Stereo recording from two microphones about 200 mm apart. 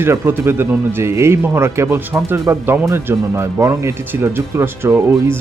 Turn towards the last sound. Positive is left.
turn(degrees=-10)  # may be behind; listen again after turning